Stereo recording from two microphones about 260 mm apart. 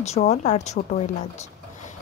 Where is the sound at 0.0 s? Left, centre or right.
Left.